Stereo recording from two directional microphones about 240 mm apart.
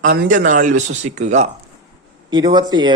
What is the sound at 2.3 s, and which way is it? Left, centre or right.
Speech, centre.